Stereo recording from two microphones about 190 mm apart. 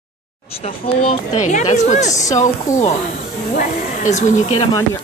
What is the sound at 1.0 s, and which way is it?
Speech, 40° left (ahead or behind).